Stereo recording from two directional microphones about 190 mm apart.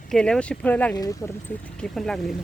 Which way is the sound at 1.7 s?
Centre (ahead or behind).